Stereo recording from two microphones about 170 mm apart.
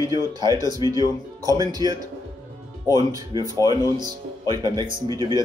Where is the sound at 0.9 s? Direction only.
20° right (ahead or behind).